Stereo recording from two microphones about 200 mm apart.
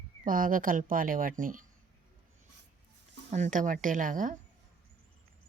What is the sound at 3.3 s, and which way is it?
Speech, 40° right (ahead or behind).